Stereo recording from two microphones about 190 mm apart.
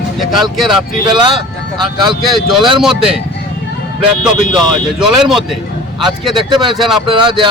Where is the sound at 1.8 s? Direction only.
25° right (ahead or behind).